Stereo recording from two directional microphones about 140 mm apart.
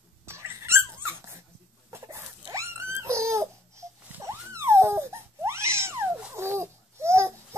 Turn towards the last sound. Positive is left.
turn(degrees=-20)  # may be behind; listen again after turning